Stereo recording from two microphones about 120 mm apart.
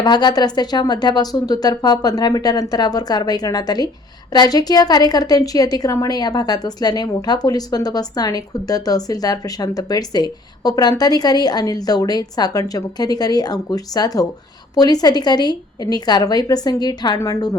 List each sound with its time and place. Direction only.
0.0 s a woman's voice: 35° left (ahead or behind)